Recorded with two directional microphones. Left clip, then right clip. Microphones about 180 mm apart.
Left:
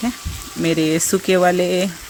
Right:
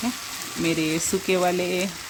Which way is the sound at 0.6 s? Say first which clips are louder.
Left 6 dB; 25° left (ahead or behind).